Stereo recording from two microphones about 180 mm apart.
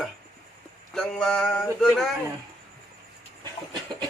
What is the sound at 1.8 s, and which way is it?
Speech, centre (ahead or behind).